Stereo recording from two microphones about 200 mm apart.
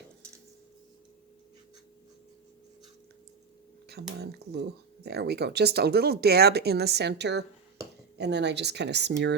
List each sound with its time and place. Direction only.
3.8 s speech: 55° right (ahead or behind)
7.8 s a sound: 15° right (ahead or behind)
8.2 s speech: 60° right (ahead or behind)